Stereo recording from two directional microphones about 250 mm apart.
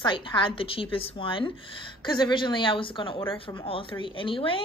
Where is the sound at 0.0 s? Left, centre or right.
Centre.